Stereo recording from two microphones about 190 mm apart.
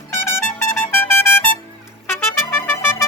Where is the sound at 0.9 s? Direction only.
10° left (ahead or behind).